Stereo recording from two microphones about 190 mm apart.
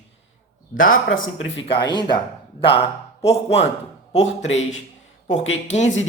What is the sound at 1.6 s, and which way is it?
Speech, 25° left (ahead or behind).